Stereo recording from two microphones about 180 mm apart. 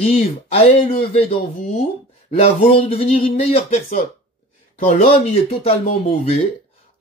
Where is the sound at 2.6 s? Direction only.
35° left (ahead or behind).